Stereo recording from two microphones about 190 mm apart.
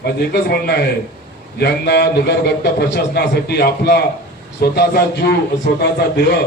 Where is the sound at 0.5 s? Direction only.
55° left (ahead or behind).